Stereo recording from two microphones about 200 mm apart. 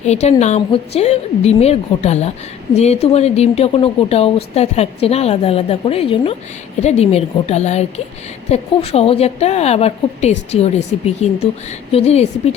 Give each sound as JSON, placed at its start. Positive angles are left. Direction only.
{"t": 0.0, "sound": "speech", "side_deg": 35}